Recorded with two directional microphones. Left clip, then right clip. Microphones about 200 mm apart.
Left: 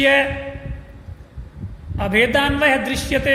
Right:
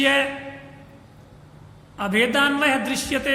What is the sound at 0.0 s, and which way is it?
Speech, 20° right (ahead or behind).